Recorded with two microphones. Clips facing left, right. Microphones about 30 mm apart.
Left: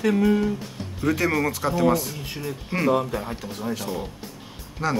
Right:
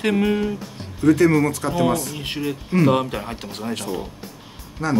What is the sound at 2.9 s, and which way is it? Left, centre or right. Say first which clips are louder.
Speech: right 2 dB; right.